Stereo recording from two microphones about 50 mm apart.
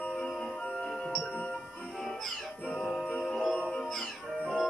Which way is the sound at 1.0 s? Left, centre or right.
Centre.